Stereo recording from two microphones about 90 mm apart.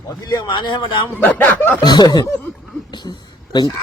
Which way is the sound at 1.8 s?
50° left (ahead or behind).